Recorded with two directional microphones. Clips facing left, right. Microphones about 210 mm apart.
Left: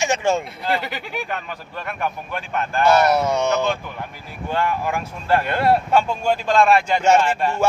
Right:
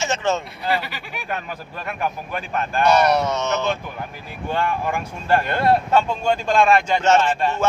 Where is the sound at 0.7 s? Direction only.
55° left (ahead or behind).